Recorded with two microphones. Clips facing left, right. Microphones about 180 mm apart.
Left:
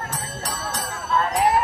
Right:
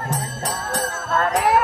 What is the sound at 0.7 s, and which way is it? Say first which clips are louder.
Jingle bell: right 1 dB; 70° right (ahead or behind).